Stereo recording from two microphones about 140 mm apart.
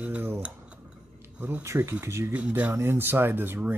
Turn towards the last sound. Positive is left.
turn(degrees=-15)  # may be behind; listen again after turning